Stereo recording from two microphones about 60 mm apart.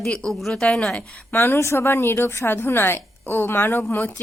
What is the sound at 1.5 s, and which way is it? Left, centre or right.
A woman's voice, left.